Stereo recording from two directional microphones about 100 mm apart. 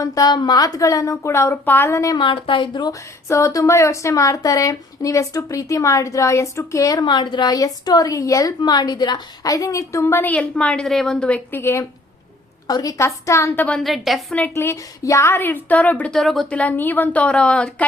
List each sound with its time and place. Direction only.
0.0 s a woman's voice: 40° left (ahead or behind)
2.1 s speech: 55° left (ahead or behind)
3.2 s a woman's voice: 30° left (ahead or behind)
7.0 s a woman's voice: 50° left (ahead or behind); by 11.9 s 25° left (ahead or behind)
12.6 s a woman's voice: 40° left (ahead or behind)
13.7 s a woman's voice: 5° left (ahead or behind)
14.5 s a woman's voice: 25° left (ahead or behind)
16.1 s a woman's voice: 5° left (ahead or behind)